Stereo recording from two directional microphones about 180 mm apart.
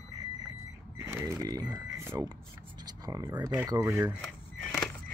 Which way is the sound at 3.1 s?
20° right (ahead or behind).